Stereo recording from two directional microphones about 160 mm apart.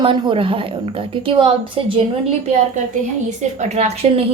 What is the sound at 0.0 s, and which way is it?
Speech, 30° right (ahead or behind).